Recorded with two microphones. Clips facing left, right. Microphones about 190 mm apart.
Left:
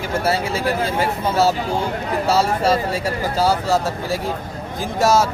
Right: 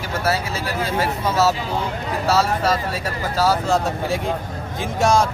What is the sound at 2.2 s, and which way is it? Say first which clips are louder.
Speech: left 1 dB; 30° left (ahead or behind).